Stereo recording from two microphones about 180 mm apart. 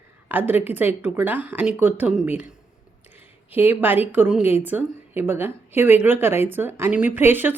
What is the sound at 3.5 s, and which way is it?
A woman's voice, 10° right (ahead or behind).